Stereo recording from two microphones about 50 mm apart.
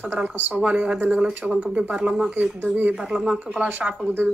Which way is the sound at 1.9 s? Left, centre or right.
Centre.